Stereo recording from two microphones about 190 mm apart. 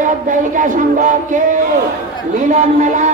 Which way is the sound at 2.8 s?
40° right (ahead or behind).